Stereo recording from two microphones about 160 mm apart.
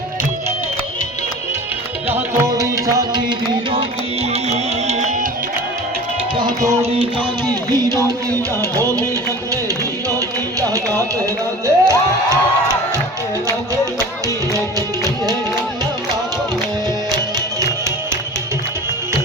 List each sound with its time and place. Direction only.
2.4 s music: 20° right (ahead or behind)
4.3 s music: 45° right (ahead or behind)
7.8 s music: 25° right (ahead or behind)
10.2 s carnatic music: 20° right (ahead or behind)
11.6 s music: 20° right (ahead or behind)
14.5 s music: 25° right (ahead or behind)